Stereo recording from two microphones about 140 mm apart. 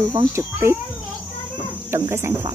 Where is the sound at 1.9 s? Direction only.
20° right (ahead or behind).